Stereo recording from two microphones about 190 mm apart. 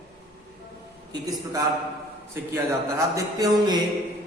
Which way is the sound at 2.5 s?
15° right (ahead or behind).